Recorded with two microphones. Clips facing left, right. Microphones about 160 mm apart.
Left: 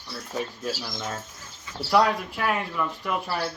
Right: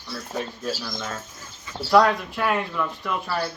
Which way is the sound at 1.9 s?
10° left (ahead or behind).